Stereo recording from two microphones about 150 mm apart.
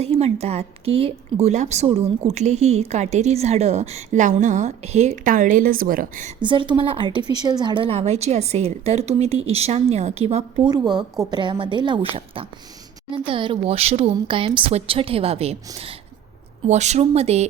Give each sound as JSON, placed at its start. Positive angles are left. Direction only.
{"t": 0.0, "sound": "a woman's voice", "side_deg": -45}
{"t": 6.4, "sound": "a woman's voice", "side_deg": -30}
{"t": 10.7, "sound": "a woman's voice", "side_deg": -30}
{"t": 16.6, "sound": "a woman's voice", "side_deg": -50}